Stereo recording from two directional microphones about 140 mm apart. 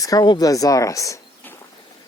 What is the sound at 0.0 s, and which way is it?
Speech, 25° left (ahead or behind).